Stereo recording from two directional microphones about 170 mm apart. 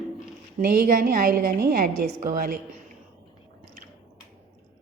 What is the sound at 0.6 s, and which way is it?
A woman's voice, 55° right (ahead or behind).